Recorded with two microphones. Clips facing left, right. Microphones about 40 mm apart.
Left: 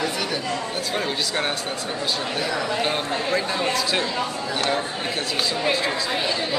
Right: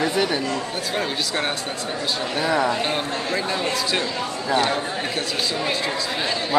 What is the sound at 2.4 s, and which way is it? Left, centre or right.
Speech, right.